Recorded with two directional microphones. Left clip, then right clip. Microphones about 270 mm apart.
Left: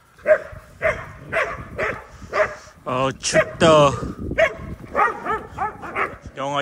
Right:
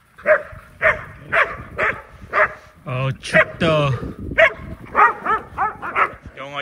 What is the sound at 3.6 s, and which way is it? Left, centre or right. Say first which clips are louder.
Bow-wow: left 5 dB; centre.